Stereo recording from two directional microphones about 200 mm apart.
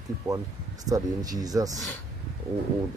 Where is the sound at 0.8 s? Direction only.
20° right (ahead or behind).